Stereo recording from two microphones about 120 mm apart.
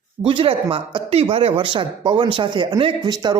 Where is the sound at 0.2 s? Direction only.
45° right (ahead or behind).